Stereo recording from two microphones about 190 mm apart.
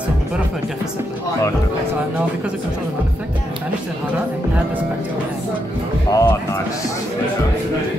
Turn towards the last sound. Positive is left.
turn(degrees=15)  # may be behind; listen again after turning